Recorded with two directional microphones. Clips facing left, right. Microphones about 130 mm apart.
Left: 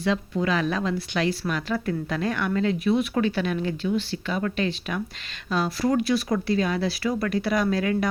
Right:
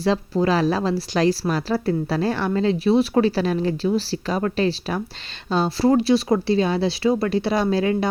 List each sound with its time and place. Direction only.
0.0 s speech: 35° right (ahead or behind)